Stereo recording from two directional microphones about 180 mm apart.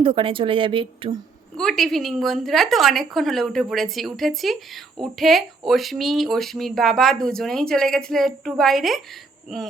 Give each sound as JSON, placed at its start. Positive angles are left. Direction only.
{"t": 0.0, "sound": "speech", "side_deg": -30}
{"t": 1.5, "sound": "speech", "side_deg": 0}